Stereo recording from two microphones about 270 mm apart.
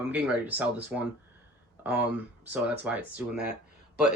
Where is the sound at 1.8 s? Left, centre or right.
Centre.